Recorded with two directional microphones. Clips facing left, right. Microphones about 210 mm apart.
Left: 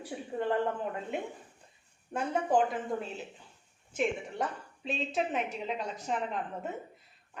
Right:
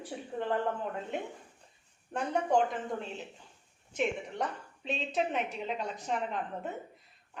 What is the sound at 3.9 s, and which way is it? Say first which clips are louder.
A woman's voice: left 1 dB; centre (ahead or behind).